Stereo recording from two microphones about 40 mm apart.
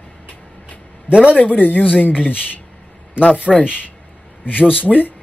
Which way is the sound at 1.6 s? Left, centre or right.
Left.